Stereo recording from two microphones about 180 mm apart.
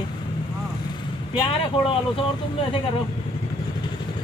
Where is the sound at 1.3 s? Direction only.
30° left (ahead or behind).